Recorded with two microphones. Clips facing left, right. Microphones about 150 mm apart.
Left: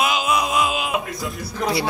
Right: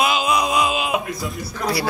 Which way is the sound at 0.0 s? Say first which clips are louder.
Right 1 dB; 5° left (ahead or behind).